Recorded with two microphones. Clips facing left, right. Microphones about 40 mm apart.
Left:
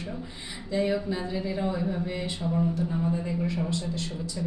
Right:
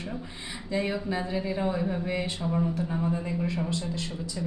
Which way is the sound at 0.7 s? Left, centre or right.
Centre.